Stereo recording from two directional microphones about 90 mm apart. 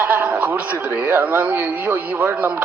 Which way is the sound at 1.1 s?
25° right (ahead or behind).